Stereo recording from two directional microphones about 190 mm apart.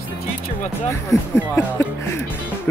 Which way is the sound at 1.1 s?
10° left (ahead or behind).